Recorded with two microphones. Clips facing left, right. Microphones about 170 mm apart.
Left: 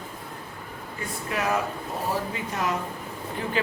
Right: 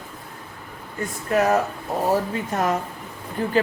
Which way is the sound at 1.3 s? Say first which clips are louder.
Right 7 dB; 45° right (ahead or behind).